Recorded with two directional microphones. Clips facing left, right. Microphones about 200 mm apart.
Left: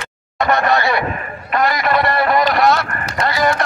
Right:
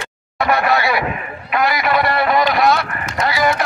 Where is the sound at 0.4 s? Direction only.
5° right (ahead or behind).